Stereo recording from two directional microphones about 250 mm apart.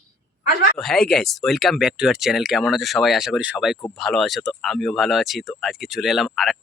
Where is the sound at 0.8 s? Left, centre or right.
Centre.